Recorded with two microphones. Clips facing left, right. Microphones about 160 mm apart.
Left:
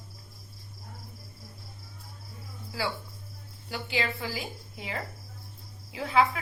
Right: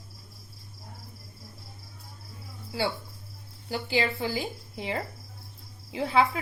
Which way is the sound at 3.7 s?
35° right (ahead or behind).